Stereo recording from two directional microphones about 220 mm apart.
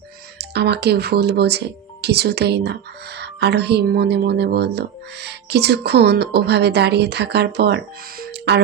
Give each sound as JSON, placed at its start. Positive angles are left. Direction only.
{"t": 0.3, "sound": "a woman's voice", "side_deg": -50}
{"t": 8.2, "sound": "music", "side_deg": -50}